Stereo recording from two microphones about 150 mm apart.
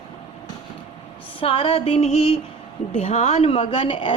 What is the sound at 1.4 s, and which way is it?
A woman's voice, 40° left (ahead or behind).